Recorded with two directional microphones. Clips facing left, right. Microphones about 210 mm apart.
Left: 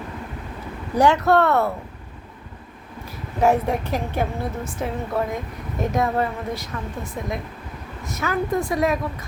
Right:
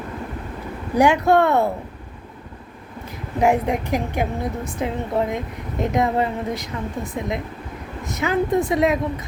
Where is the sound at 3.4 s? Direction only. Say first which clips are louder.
Even; 15° right (ahead or behind).